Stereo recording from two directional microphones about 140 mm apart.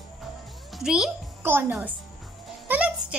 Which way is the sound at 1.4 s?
15° right (ahead or behind).